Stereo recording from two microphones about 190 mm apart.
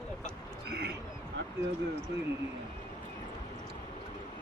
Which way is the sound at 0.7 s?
60° right (ahead or behind).